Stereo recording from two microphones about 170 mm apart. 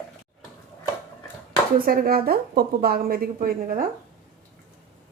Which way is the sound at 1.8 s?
60° right (ahead or behind).